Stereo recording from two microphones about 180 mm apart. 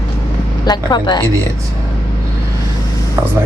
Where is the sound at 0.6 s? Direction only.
25° left (ahead or behind).